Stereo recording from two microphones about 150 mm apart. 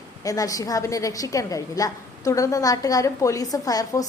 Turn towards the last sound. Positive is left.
turn(degrees=25)  # may be behind; listen again after turning